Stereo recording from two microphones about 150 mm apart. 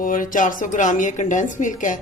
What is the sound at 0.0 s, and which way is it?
A woman's voice, 60° left (ahead or behind).